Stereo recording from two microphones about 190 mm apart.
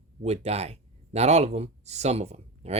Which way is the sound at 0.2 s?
35° right (ahead or behind).